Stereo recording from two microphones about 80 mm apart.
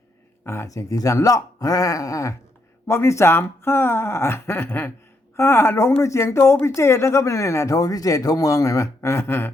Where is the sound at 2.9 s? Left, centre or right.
Left.